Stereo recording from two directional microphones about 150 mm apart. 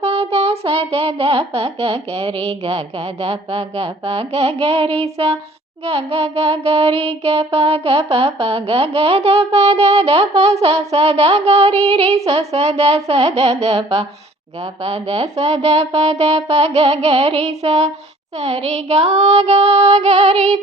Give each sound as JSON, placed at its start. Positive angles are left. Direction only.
{"t": 0.0, "sound": "child singing", "side_deg": -40}